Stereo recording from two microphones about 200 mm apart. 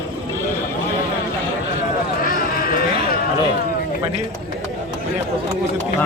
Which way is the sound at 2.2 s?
45° left (ahead or behind).